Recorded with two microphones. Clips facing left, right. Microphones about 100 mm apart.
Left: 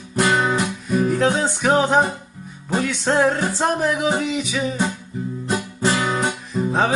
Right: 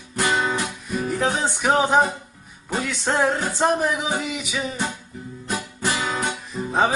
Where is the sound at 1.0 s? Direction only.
Centre (ahead or behind).